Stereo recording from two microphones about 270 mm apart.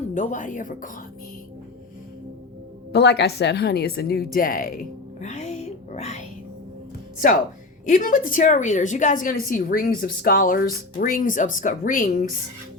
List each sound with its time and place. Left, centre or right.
0.1 s a woman's voice: left
2.9 s a woman's voice: left
7.9 s a woman's voice: left